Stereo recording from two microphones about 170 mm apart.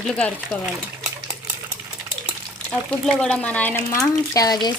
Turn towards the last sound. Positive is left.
turn(degrees=20)  # may be behind; listen again after turning